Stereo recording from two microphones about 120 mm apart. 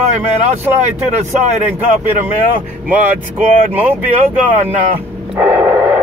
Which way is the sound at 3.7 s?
15° right (ahead or behind).